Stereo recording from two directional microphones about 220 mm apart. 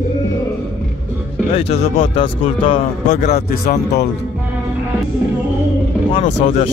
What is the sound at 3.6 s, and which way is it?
Speech, 50° left (ahead or behind).